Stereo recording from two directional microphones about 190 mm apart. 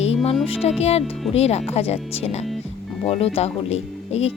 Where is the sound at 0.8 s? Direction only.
35° left (ahead or behind).